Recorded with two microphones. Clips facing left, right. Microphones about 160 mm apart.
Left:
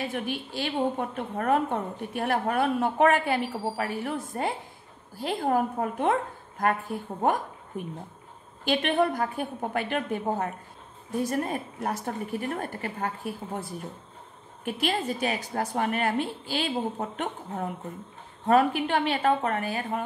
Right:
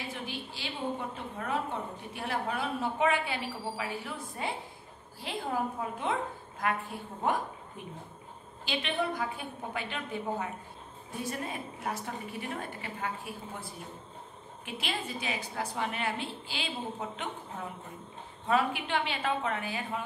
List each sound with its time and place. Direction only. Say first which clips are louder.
0.1 s a woman's voice: left 8 dB; 60° left (ahead or behind)